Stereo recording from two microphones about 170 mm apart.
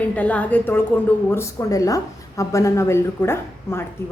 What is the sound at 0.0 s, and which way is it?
A woman's voice, 10° left (ahead or behind).